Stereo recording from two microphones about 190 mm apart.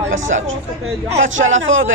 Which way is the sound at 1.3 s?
40° right (ahead or behind).